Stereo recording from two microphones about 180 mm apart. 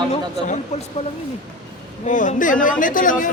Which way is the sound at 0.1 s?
40° left (ahead or behind).